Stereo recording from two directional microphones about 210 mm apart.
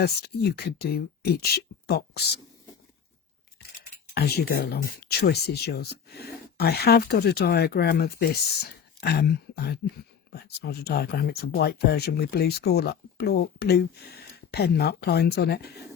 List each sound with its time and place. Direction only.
0.0 s speech: 50° left (ahead or behind)
4.1 s speech: 50° left (ahead or behind)